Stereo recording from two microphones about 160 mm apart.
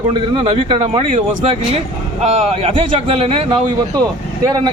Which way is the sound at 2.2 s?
40° right (ahead or behind).